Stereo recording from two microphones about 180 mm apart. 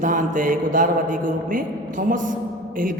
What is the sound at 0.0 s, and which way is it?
A woman's voice, 45° right (ahead or behind).